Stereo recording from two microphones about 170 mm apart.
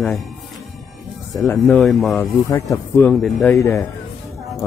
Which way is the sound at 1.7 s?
Centre (ahead or behind).